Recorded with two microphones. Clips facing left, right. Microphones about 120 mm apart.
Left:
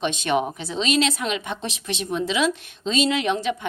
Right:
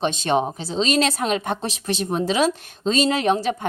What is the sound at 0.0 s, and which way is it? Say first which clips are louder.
A woman's voice: right 2 dB; 35° right (ahead or behind).